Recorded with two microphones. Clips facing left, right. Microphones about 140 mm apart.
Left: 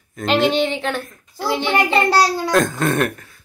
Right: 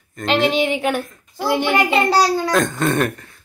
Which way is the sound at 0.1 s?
Centre (ahead or behind).